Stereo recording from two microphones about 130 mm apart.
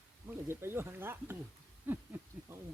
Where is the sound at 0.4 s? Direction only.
20° right (ahead or behind).